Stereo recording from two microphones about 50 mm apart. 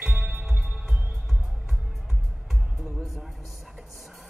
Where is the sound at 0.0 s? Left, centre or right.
Centre.